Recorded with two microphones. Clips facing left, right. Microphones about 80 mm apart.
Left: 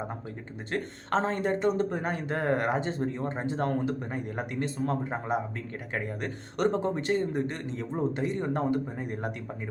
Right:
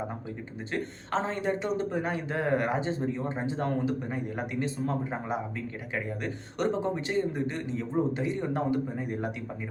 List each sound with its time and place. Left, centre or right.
0.7 s a man's voice: left